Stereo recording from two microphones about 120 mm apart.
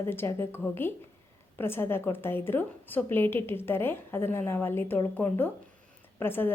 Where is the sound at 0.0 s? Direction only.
20° left (ahead or behind).